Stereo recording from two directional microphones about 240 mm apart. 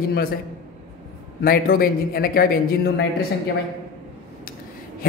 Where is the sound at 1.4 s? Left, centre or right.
Left.